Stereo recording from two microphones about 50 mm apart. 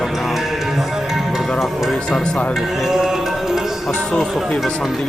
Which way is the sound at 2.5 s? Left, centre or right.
Centre.